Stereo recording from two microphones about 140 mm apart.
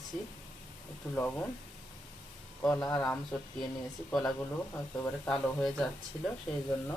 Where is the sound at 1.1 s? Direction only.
10° left (ahead or behind).